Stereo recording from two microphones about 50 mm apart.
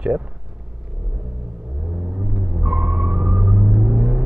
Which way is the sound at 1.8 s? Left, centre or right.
Right.